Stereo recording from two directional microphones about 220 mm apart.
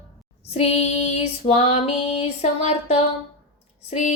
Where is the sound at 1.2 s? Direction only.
30° left (ahead or behind).